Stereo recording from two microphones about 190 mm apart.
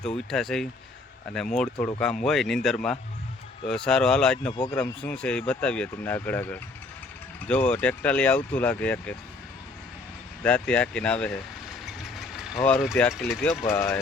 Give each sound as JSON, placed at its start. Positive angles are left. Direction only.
{"t": 0.0, "sound": "speech", "side_deg": 5}
{"t": 4.5, "sound": "speech", "side_deg": 20}
{"t": 4.8, "sound": "speech", "side_deg": 5}
{"t": 10.4, "sound": "speech", "side_deg": 5}
{"t": 12.1, "sound": "vehicle", "side_deg": 0}
{"t": 13.7, "sound": "speech", "side_deg": 10}